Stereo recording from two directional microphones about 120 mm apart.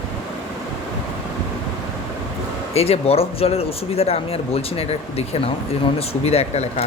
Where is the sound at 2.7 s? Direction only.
55° left (ahead or behind).